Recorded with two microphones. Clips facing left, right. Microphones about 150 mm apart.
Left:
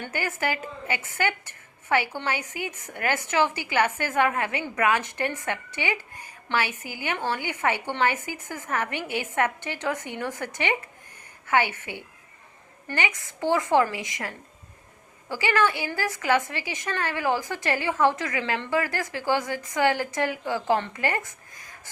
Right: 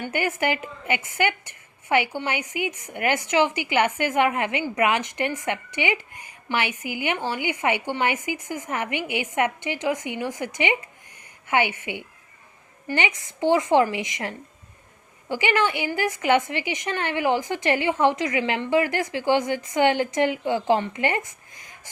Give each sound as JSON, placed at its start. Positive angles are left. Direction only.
{"t": 0.1, "sound": "a woman's voice", "side_deg": -20}